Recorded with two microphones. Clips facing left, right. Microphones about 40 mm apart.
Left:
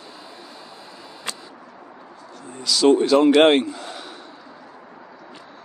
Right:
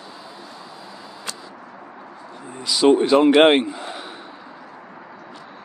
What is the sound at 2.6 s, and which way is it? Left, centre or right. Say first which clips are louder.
Speech: right 1 dB; centre.